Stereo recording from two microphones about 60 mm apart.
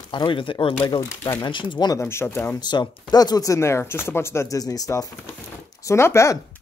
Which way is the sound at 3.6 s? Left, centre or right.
Left.